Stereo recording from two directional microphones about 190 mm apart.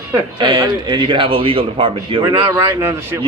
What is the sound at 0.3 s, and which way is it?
Speech, 25° right (ahead or behind).